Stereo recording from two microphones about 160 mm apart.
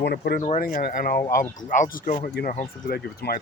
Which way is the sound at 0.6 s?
60° left (ahead or behind).